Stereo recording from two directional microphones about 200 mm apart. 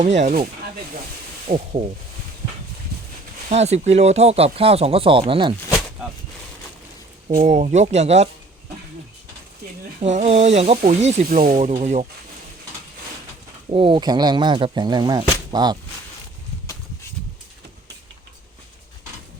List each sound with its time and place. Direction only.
0.0 s speech: 35° right (ahead or behind)
1.5 s speech: 25° right (ahead or behind)
3.5 s speech: 35° right (ahead or behind)
7.3 s speech: 35° right (ahead or behind)
10.0 s speech: 35° right (ahead or behind)
13.7 s speech: 25° right (ahead or behind)